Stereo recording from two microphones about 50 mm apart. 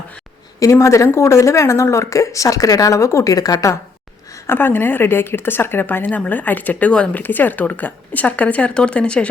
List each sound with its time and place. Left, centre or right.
0.7 s speech: left
4.4 s a woman's voice: left
6.1 s a woman's voice: left